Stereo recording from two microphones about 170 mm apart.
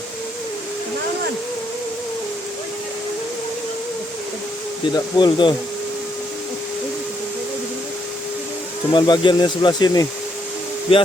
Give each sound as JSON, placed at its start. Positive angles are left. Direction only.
{"t": 4.9, "sound": "speech", "side_deg": 25}
{"t": 8.9, "sound": "speech", "side_deg": 25}